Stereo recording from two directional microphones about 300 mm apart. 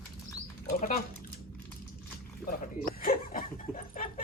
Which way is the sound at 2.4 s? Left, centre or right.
Left.